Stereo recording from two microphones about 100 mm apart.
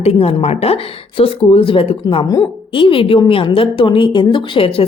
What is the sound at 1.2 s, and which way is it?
Speech, 65° left (ahead or behind).